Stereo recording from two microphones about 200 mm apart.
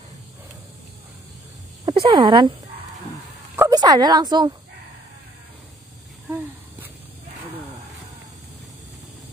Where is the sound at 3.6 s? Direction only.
15° right (ahead or behind).